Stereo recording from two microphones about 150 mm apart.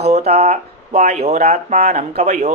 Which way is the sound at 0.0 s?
45° right (ahead or behind).